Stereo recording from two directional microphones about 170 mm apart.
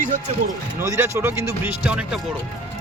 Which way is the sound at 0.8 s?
15° right (ahead or behind).